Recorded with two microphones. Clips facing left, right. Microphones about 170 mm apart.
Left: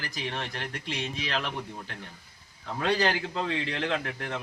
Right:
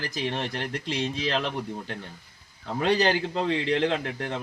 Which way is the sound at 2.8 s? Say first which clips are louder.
Right 3 dB; 25° right (ahead or behind).